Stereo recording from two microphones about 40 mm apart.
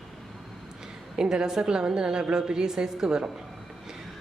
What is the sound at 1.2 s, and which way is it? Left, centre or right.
A woman's voice, centre.